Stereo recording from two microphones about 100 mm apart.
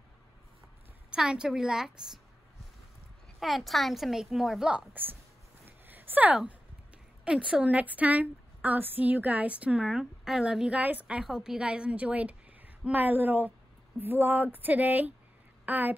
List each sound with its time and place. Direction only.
1.1 s a woman's voice: 10° right (ahead or behind)
3.3 s a woman's voice: centre (ahead or behind)
5.7 s a sound: 20° right (ahead or behind)
7.2 s a woman's voice: 10° right (ahead or behind)